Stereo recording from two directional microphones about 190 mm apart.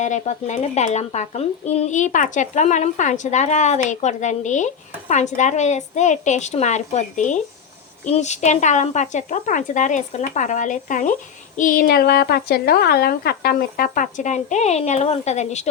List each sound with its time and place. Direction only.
0.0 s a woman's voice: 40° left (ahead or behind)